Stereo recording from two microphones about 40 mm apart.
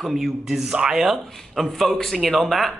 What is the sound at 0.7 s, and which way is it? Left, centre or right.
Speech, right.